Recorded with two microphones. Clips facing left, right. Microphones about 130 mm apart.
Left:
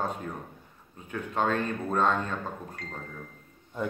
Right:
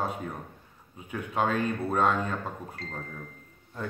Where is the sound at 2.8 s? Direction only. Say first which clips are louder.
Right 1 dB; 30° right (ahead or behind).